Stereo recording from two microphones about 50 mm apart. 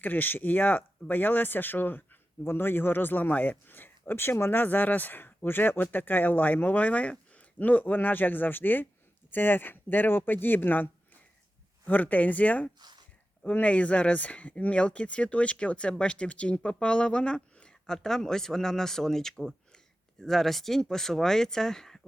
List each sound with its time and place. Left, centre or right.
0.0 s speech: left
4.6 s speech: left; by 22.0 s centre